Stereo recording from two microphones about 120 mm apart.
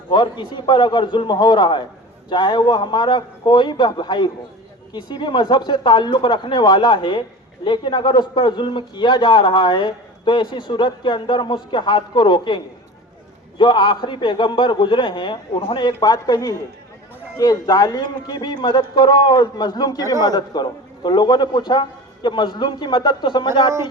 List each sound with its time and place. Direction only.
0.1 s speech: 40° left (ahead or behind)